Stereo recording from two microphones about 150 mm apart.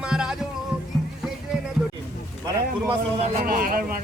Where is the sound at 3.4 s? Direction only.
80° right.